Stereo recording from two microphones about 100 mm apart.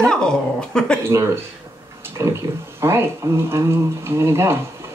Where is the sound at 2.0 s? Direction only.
25° right (ahead or behind).